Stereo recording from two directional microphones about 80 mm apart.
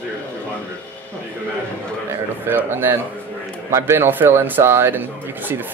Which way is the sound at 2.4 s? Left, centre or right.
Right.